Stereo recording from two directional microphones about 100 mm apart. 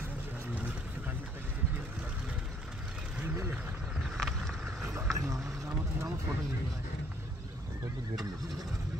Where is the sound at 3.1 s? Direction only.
20° right (ahead or behind).